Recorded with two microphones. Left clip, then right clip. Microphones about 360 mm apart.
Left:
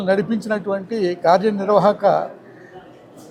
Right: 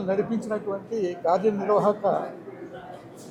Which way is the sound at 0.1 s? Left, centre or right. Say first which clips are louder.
Left 7 dB; left.